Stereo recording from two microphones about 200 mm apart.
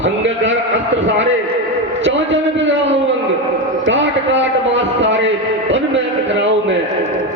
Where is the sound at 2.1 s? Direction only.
65° right (ahead or behind).